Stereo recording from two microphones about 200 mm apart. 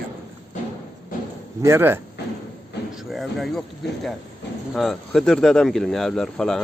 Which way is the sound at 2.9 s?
Centre (ahead or behind).